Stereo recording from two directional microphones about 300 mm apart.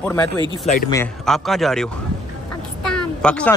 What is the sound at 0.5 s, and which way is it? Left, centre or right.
Speech, left.